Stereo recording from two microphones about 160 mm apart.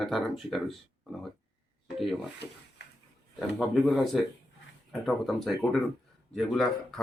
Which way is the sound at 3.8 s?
Centre (ahead or behind).